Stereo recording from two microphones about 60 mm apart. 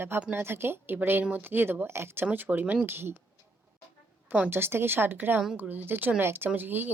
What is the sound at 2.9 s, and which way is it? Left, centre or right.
Speech, right.